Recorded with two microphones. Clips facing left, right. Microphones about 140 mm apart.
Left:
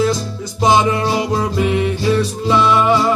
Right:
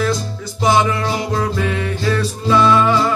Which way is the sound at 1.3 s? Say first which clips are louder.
Left 3 dB; 20° left (ahead or behind).